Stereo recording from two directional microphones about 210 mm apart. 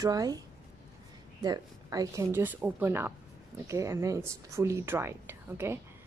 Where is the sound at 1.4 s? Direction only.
20° right (ahead or behind).